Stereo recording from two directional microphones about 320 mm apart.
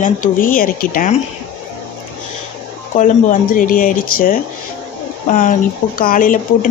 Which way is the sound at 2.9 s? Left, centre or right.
Left.